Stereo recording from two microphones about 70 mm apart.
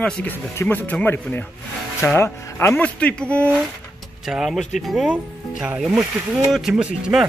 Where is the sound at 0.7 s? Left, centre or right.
Left.